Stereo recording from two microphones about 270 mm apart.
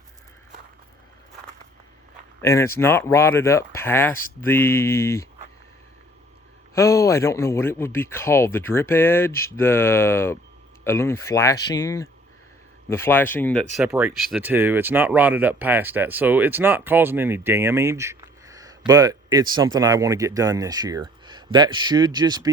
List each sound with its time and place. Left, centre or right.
2.4 s speech: centre
6.7 s speech: centre
13.7 s speech: centre